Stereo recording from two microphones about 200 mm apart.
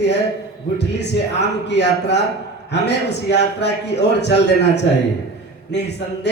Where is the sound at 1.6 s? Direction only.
60° left (ahead or behind).